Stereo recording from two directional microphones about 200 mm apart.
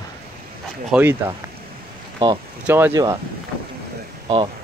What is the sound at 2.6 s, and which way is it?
Speech, 10° right (ahead or behind).